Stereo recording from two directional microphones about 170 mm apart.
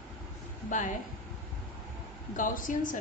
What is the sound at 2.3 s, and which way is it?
Speech, 50° left (ahead or behind).